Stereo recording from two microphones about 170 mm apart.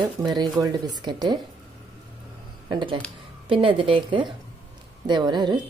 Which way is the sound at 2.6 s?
25° right (ahead or behind).